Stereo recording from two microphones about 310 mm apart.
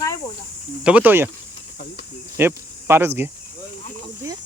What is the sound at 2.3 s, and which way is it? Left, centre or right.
Speech, centre.